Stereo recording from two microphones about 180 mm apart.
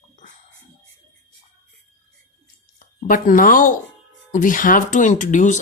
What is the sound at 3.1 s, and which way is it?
Speech, 45° left (ahead or behind).